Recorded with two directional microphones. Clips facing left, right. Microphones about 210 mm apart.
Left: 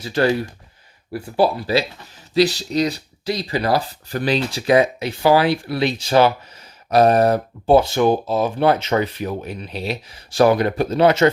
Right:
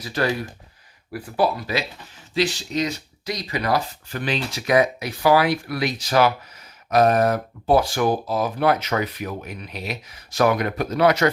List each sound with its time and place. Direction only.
0.0 s speech: 30° left (ahead or behind)